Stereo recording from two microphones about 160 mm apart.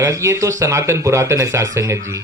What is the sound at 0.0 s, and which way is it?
Speech, 20° right (ahead or behind).